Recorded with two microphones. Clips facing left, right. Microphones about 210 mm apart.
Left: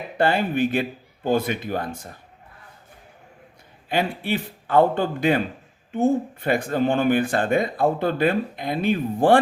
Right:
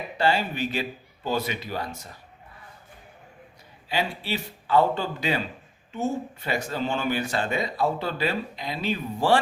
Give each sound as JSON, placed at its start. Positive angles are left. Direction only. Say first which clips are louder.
{"t": 0.2, "sound": "speech", "louder": "left 5 dB", "side_deg": 55}
{"t": 3.8, "sound": "speech", "louder": "left 5 dB", "side_deg": 55}